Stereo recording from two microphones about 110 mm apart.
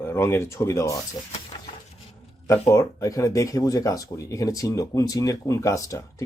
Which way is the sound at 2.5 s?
30° left (ahead or behind).